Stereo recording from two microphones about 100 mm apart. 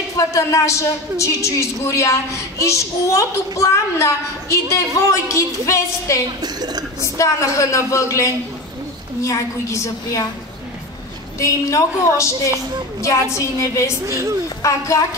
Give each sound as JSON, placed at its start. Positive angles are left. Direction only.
{"t": 0.3, "sound": "a woman's voice", "side_deg": 30}
{"t": 6.4, "sound": "a woman's voice", "side_deg": -40}
{"t": 7.2, "sound": "a woman's voice", "side_deg": 30}
{"t": 11.3, "sound": "a woman's voice", "side_deg": 30}
{"t": 14.0, "sound": "speech", "side_deg": -30}
{"t": 14.6, "sound": "a woman's voice", "side_deg": 30}